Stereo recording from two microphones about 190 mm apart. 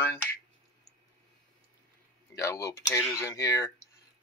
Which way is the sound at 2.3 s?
15° left (ahead or behind).